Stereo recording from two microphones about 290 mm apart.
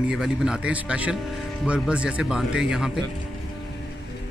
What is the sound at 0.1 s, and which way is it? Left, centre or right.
Speech, centre.